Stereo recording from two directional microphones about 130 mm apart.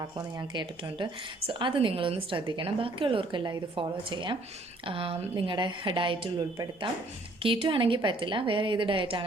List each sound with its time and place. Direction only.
0.0 s a woman's voice: 30° right (ahead or behind)